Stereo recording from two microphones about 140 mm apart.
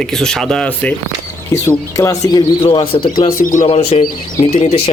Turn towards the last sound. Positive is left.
turn(degrees=50)  # may be behind; listen again after turning